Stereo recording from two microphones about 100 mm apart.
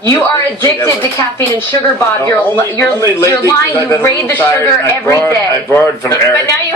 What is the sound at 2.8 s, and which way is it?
A man's voice, 15° left (ahead or behind).